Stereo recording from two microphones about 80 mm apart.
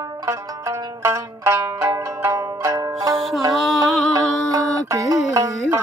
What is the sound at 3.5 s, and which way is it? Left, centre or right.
Music, centre.